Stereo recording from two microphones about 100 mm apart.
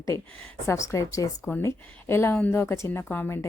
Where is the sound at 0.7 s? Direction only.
30° left (ahead or behind).